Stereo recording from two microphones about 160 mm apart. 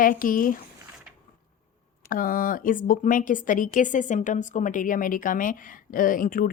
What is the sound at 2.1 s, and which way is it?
Speech, 60° left (ahead or behind).